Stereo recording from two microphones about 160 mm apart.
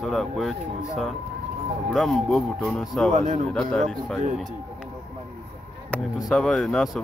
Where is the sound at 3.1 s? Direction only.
50° right (ahead or behind).